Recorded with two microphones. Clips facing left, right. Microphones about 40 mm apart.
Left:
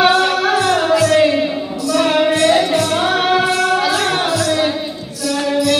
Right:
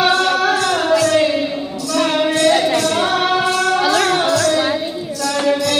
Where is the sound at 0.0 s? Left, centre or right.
Centre.